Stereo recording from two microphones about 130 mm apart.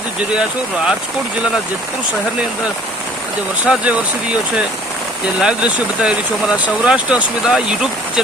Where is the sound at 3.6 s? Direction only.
10° right (ahead or behind).